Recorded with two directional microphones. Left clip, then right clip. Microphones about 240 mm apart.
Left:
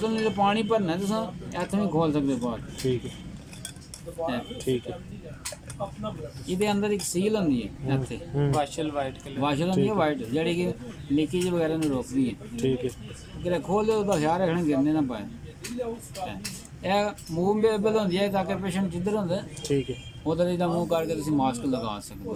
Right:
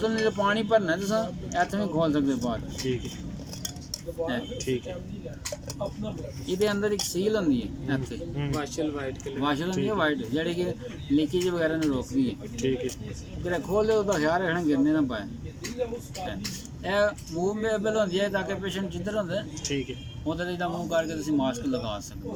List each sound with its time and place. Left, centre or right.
0.0 s speech: centre
4.3 s speech: centre
6.5 s speech: centre
16.8 s a man's voice: centre